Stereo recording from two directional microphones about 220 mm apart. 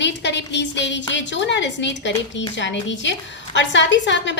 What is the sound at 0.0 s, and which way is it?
A woman's voice, 55° left (ahead or behind).